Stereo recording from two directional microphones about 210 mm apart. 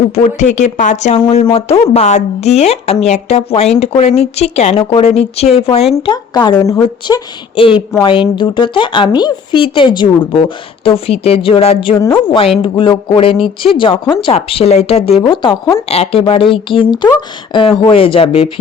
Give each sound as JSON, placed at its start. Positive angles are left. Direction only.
{"t": 0.1, "sound": "a woman's voice", "side_deg": 35}
{"t": 15.9, "sound": "a woman's voice", "side_deg": 30}